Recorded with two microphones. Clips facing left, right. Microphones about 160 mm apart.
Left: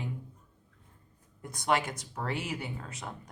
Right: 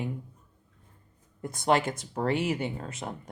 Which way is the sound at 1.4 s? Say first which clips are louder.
Right 4 dB; 30° right (ahead or behind).